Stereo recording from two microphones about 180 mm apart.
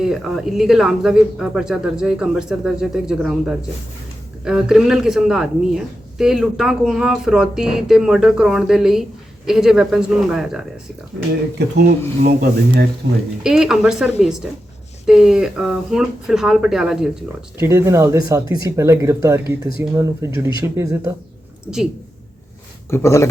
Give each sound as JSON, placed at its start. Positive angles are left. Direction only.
{"t": 0.0, "sound": "a woman's voice", "side_deg": -5}
{"t": 12.2, "sound": "speech", "side_deg": -55}
{"t": 13.0, "sound": "speech", "side_deg": -65}
{"t": 13.4, "sound": "a woman's voice", "side_deg": -5}
{"t": 17.6, "sound": "speech", "side_deg": -15}
{"t": 22.9, "sound": "speech", "side_deg": 15}